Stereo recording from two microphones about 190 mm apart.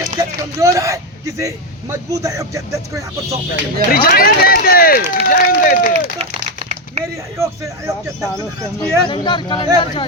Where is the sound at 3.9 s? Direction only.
50° left (ahead or behind).